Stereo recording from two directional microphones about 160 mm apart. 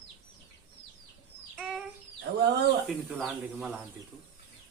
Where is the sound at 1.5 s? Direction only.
Centre (ahead or behind).